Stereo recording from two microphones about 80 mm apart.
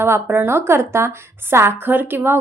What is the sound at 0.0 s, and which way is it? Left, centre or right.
A woman's voice, right.